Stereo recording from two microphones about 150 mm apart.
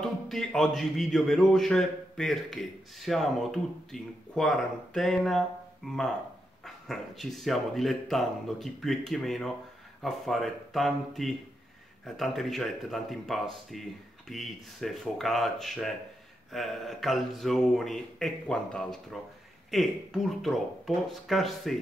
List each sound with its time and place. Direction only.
0.0 s speech: 5° left (ahead or behind)